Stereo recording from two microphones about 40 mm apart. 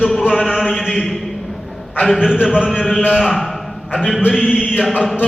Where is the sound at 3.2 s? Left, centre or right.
Centre.